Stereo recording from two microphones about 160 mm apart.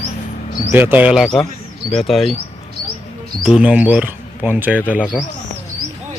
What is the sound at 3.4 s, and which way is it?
Speech, 5° right (ahead or behind).